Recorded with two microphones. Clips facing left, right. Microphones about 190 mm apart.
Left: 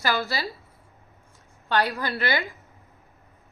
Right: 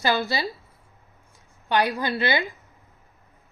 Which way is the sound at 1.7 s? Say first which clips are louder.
Right 2 dB; 15° right (ahead or behind).